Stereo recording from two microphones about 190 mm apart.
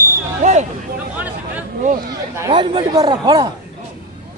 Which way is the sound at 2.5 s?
25° right (ahead or behind).